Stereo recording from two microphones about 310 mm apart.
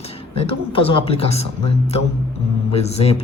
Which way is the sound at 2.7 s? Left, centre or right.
Centre.